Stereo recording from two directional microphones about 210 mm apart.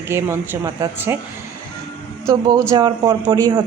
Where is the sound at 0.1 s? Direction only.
10° right (ahead or behind).